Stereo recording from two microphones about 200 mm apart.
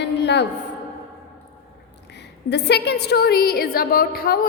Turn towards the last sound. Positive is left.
turn(degrees=45)  # may be behind; listen again after turning